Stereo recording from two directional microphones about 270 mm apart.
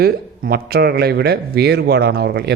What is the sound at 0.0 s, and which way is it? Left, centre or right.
Speech, right.